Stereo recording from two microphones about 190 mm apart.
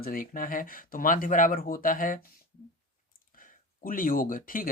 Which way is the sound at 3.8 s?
45° left (ahead or behind).